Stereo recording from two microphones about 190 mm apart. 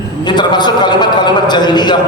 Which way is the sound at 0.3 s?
20° left (ahead or behind).